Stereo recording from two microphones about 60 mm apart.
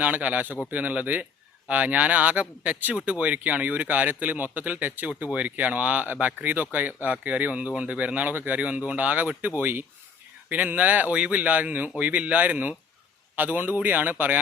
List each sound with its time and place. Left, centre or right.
0.0 s a man's voice: right